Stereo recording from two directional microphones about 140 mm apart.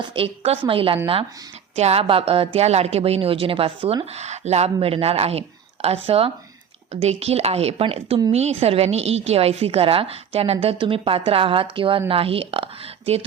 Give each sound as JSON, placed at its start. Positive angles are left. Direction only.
{"t": 0.0, "sound": "a woman's voice", "side_deg": -40}